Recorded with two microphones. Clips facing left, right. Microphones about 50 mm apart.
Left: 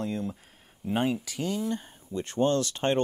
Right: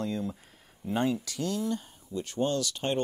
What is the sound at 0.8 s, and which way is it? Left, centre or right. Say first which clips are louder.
Speech: left 1 dB; centre.